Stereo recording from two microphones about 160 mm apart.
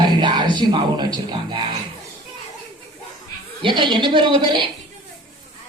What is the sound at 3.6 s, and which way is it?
Speech, 30° right (ahead or behind).